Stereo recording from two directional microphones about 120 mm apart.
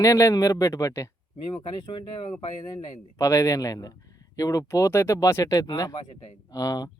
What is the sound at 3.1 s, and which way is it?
Speech, 25° left (ahead or behind).